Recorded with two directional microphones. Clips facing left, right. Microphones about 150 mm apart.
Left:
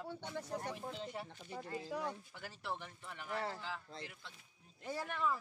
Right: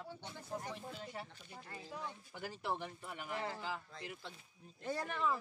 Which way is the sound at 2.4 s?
15° right (ahead or behind).